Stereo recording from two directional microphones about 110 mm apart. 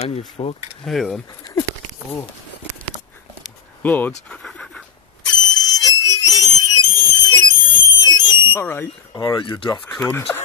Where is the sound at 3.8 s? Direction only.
15° left (ahead or behind).